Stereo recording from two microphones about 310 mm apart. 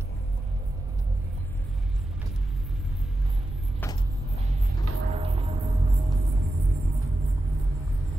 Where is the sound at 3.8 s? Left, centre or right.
Centre.